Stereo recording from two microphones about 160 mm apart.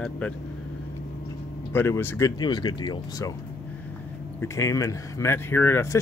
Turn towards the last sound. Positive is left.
turn(degrees=15)  # may be behind; listen again after turning